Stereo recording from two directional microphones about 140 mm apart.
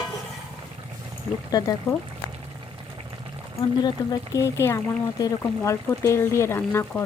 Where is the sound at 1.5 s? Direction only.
25° left (ahead or behind).